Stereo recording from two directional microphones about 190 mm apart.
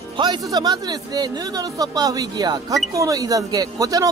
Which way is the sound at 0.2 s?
20° right (ahead or behind).